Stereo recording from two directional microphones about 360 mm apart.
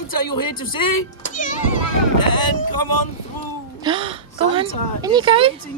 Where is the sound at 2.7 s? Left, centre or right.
Left.